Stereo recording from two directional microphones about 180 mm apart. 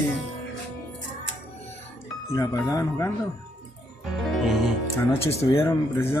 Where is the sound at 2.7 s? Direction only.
20° left (ahead or behind).